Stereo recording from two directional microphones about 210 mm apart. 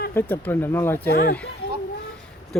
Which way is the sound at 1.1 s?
50° left (ahead or behind).